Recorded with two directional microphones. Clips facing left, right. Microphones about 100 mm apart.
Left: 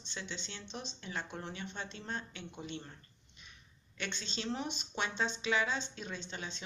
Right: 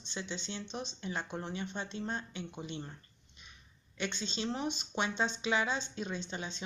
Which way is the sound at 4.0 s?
15° right (ahead or behind).